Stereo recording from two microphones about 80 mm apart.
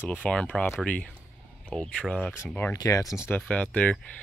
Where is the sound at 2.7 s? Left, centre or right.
Left.